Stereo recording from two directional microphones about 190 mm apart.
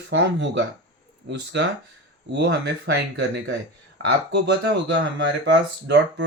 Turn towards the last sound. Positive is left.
turn(degrees=-65)  # may be behind; listen again after turning